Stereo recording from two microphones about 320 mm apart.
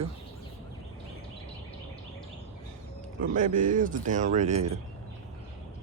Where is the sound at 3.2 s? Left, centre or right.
Right.